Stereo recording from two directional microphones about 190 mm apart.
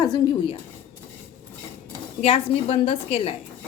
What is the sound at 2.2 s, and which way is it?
A woman's voice, 30° left (ahead or behind).